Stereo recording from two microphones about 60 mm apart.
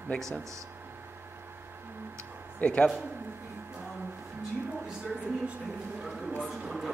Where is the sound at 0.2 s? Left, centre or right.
Centre.